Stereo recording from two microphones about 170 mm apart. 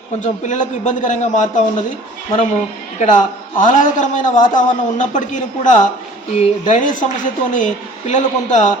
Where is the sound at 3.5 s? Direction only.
50° left (ahead or behind).